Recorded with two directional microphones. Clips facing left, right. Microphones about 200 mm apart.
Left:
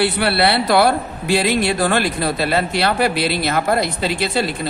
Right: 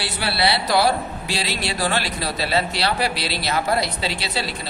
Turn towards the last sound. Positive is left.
turn(degrees=50)  # may be behind; listen again after turning